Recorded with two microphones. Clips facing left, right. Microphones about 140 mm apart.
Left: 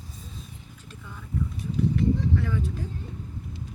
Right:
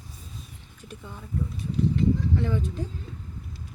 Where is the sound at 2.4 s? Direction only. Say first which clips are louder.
Right 2 dB; 25° right (ahead or behind).